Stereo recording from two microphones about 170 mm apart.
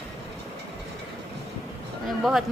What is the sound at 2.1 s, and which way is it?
Speech, centre (ahead or behind).